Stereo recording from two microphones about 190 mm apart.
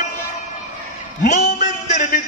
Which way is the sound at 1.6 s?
40° left (ahead or behind).